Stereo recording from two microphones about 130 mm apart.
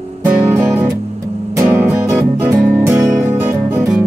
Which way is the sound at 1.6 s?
15° right (ahead or behind).